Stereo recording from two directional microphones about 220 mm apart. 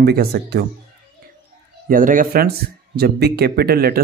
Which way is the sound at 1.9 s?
40° right (ahead or behind).